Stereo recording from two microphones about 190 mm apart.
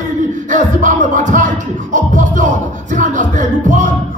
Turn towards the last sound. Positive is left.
turn(degrees=-40)  # may be behind; listen again after turning